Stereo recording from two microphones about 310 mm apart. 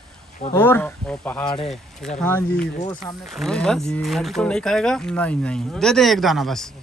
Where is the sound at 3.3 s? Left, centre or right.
Centre.